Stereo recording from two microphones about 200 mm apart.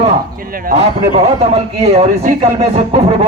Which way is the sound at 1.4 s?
30° right (ahead or behind).